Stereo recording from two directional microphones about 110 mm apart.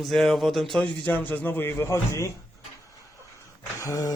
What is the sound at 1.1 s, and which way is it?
A man's voice, 15° left (ahead or behind).